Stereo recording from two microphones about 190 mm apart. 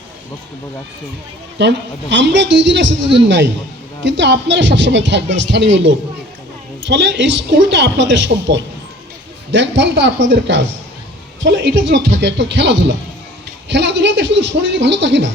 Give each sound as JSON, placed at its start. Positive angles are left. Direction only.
{"t": 1.5, "sound": "speech", "side_deg": -65}